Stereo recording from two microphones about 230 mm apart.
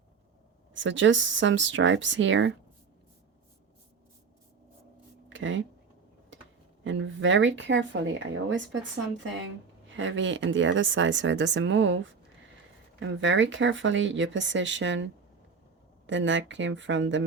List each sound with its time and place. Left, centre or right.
0.7 s speech: right
5.3 s a sound: right
6.8 s speech: right
10.0 s speech: right
13.0 s speech: right